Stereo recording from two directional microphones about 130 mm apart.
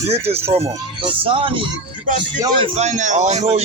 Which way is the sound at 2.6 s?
60° right (ahead or behind).